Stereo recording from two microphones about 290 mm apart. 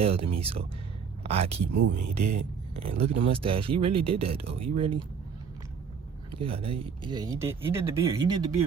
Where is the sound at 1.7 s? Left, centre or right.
Right.